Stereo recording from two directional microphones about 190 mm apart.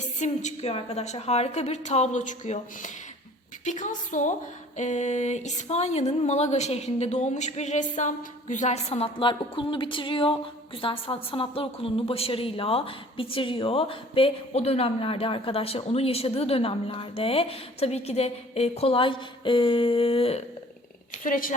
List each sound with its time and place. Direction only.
0.2 s a woman's voice: 35° left (ahead or behind)
21.2 s a woman's voice: 45° left (ahead or behind)